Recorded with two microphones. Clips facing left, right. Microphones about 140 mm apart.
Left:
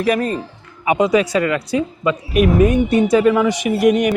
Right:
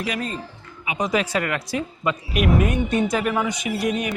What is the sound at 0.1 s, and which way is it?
Speech, 55° left (ahead or behind).